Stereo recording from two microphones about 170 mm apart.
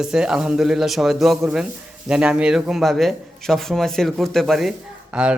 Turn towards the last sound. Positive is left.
turn(degrees=-5)  # may be behind; listen again after turning